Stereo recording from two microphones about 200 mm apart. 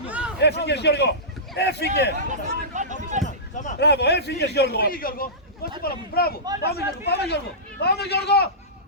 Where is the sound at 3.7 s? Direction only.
55° left (ahead or behind).